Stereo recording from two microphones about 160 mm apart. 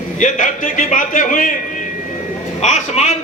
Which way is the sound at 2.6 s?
45° left (ahead or behind).